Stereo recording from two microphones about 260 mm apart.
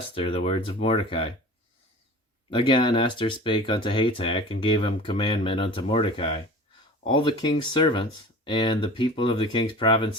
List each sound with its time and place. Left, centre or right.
0.1 s speech: left
2.5 s speech: centre